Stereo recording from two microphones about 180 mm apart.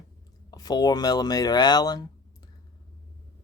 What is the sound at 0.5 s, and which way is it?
Speech, 20° left (ahead or behind).